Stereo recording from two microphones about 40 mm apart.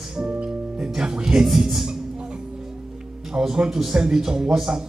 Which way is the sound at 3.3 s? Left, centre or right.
Centre.